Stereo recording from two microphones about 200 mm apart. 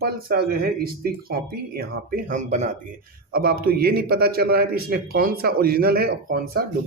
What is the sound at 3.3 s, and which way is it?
Speech, 50° right (ahead or behind).